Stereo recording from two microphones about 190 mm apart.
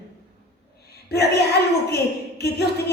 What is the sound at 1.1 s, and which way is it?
Speech, 60° left (ahead or behind).